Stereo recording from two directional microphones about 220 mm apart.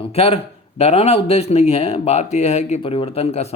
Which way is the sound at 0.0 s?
25° left (ahead or behind).